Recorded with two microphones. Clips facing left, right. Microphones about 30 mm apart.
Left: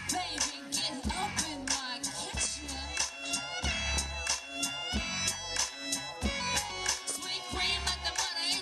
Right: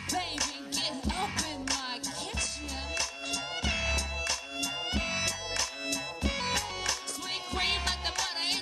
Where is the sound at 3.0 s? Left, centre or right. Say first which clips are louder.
Right 1 dB; right.